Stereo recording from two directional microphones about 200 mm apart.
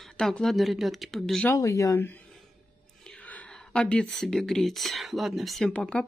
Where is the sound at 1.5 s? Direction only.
15° left (ahead or behind).